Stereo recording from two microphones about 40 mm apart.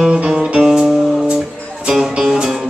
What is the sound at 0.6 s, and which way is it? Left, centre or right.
Music, centre.